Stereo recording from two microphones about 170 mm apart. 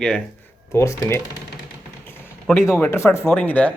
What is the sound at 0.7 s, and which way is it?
Speech, 15° left (ahead or behind).